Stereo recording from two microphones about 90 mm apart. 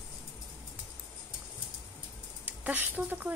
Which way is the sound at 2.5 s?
20° right (ahead or behind).